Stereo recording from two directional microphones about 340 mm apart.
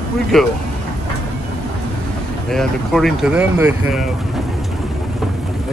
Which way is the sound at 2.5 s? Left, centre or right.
Centre.